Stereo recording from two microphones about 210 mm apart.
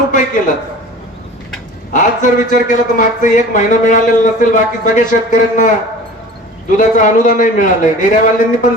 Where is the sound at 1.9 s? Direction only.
35° left (ahead or behind).